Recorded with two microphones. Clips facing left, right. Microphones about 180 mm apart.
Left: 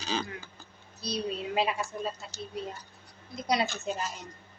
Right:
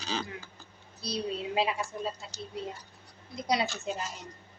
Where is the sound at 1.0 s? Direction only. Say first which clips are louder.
Left 1 dB; 25° right (ahead or behind).